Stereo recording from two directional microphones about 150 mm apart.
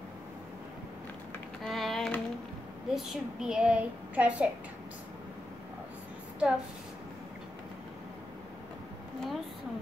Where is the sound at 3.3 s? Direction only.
5° right (ahead or behind).